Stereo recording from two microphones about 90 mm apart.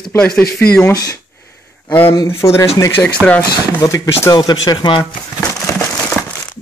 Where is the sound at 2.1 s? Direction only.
30° left (ahead or behind); by 4.9 s 50° left (ahead or behind).